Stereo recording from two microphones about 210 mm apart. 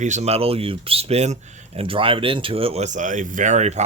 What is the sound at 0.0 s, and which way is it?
Speech, 35° right (ahead or behind).